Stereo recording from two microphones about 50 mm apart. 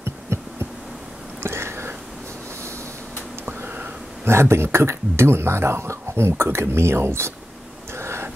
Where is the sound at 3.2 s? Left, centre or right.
Right.